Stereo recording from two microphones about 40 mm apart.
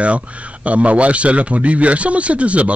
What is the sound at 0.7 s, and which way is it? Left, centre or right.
Speech, right.